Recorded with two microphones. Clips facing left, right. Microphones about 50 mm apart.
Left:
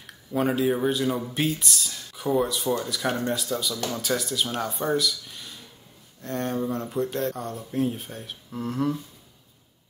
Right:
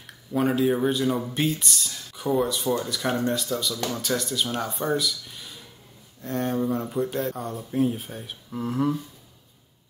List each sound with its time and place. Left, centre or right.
0.0 s speech: centre